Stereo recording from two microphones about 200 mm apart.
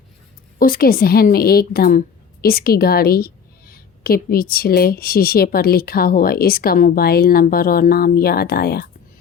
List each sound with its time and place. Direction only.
0.6 s a woman's voice: 45° left (ahead or behind)